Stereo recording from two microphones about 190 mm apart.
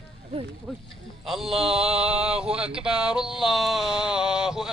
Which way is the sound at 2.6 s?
5° right (ahead or behind).